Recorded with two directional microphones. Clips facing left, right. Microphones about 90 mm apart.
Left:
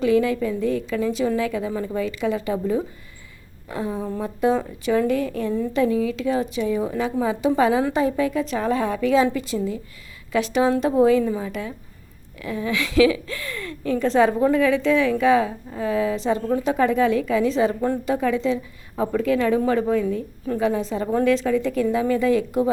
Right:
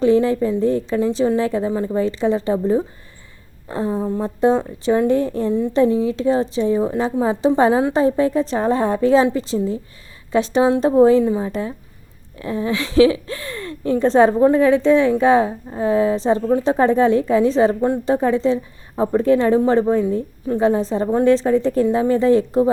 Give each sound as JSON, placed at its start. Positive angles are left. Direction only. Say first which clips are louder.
{"t": 0.0, "sound": "a woman's voice", "louder": "right 4 dB", "side_deg": -30}
{"t": 17.7, "sound": "a woman's voice", "louder": "right 4 dB", "side_deg": -20}
{"t": 18.1, "sound": "a woman's voice", "louder": "right 5 dB", "side_deg": -30}